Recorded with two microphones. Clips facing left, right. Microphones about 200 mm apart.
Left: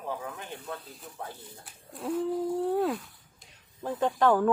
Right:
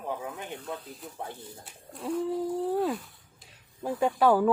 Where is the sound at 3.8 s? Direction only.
15° right (ahead or behind).